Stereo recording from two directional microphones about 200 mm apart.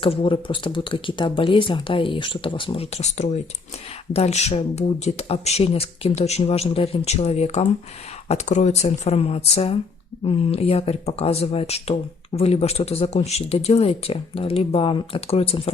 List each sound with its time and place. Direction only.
0.0 s speech: 30° left (ahead or behind)